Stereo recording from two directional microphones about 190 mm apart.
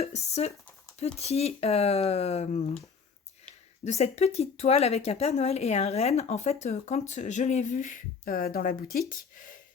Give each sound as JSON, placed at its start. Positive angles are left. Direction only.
{"t": 0.0, "sound": "a woman's voice", "side_deg": 35}
{"t": 3.8, "sound": "a woman's voice", "side_deg": 35}